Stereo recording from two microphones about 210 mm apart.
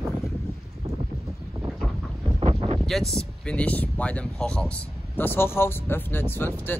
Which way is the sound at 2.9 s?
Centre (ahead or behind).